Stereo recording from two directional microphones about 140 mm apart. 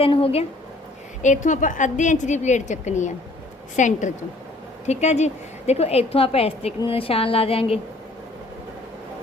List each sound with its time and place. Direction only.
0.0 s a woman's voice: 40° left (ahead or behind)
1.2 s a woman's voice: 60° left (ahead or behind); by 7.8 s 45° left (ahead or behind)